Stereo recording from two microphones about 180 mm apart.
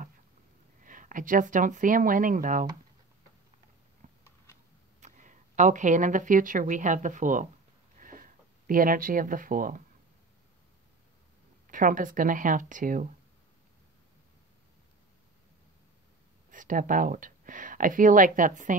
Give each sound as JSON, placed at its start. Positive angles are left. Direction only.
{"t": 0.8, "sound": "speech", "side_deg": -45}
{"t": 4.0, "sound": "a sound", "side_deg": -40}
{"t": 5.0, "sound": "speech", "side_deg": -45}
{"t": 8.0, "sound": "a sound", "side_deg": -50}
{"t": 11.6, "sound": "speech", "side_deg": -50}
{"t": 16.4, "sound": "speech", "side_deg": -45}